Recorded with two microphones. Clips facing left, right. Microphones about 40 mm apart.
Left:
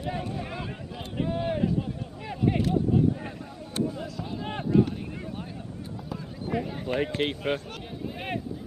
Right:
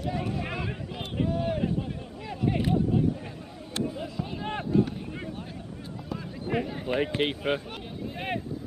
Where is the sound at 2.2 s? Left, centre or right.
Centre.